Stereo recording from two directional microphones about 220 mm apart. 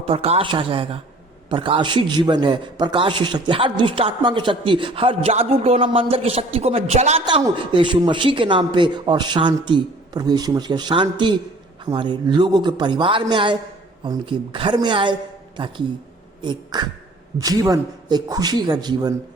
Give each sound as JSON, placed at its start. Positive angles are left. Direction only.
{"t": 0.0, "sound": "a man's voice", "side_deg": -30}